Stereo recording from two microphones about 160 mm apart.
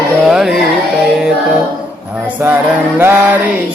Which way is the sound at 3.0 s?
10° right (ahead or behind).